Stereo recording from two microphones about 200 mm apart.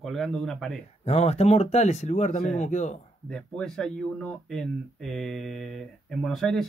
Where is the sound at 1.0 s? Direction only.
30° left (ahead or behind).